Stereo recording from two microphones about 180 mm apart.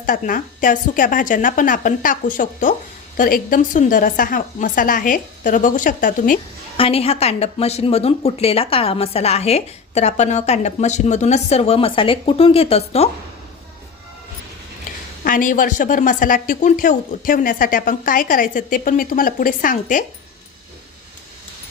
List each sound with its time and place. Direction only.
0.0 s speech: 50° left (ahead or behind)
6.7 s speech: 30° left (ahead or behind)
14.9 s a sound: 50° left (ahead or behind)
15.2 s speech: 50° left (ahead or behind)